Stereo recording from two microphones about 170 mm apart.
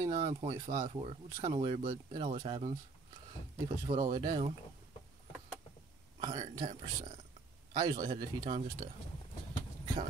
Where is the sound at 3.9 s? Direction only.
30° right (ahead or behind).